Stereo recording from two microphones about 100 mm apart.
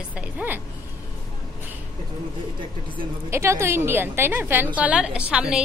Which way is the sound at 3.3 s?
25° right (ahead or behind).